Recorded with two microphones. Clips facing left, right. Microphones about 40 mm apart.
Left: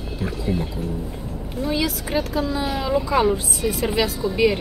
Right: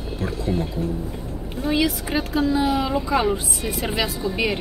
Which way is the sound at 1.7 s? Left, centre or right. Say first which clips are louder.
Right 2 dB; right.